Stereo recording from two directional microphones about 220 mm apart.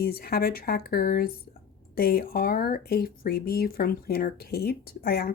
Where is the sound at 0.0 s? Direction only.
45° left (ahead or behind).